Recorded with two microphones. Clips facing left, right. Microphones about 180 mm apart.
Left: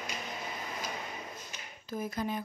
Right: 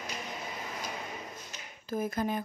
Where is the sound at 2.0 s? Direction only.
50° right (ahead or behind).